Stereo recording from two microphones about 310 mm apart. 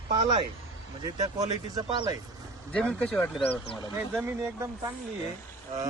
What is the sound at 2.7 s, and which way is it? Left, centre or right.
Speech, centre.